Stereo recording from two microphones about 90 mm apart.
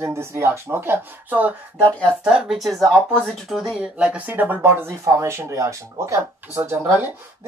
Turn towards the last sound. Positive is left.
turn(degrees=-25)  # may be behind; listen again after turning